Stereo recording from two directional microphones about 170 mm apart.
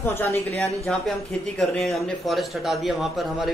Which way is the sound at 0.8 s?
Centre (ahead or behind).